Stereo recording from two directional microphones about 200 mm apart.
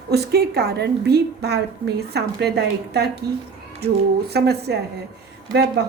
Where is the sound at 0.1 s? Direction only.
55° right (ahead or behind).